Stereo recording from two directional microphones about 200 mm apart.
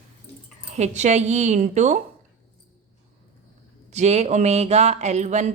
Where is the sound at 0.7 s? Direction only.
35° right (ahead or behind).